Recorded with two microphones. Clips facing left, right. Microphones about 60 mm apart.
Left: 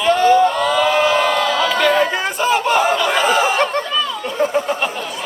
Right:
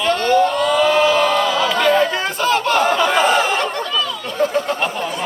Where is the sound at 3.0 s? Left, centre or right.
Centre.